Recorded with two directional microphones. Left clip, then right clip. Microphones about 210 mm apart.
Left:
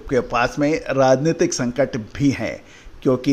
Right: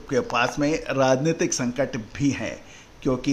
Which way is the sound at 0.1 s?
20° left (ahead or behind).